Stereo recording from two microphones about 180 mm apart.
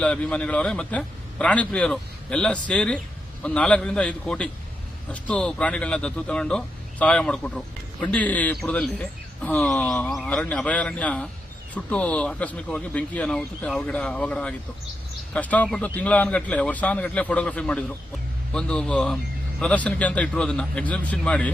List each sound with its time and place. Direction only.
0.0 s a man's voice: 5° left (ahead or behind)